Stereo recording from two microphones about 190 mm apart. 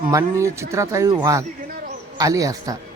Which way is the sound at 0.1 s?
15° right (ahead or behind).